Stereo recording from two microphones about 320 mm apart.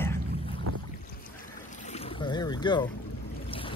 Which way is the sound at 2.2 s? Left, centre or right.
Centre.